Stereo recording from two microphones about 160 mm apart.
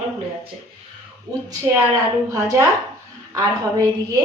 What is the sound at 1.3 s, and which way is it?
Speech, 25° right (ahead or behind).